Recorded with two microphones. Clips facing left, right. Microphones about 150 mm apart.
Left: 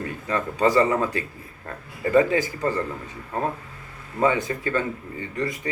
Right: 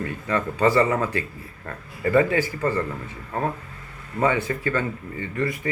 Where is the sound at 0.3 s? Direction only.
15° left (ahead or behind).